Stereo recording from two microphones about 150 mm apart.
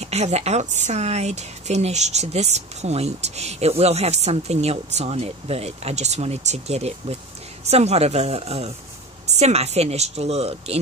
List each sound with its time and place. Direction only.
0.0 s a woman's voice: 45° right (ahead or behind)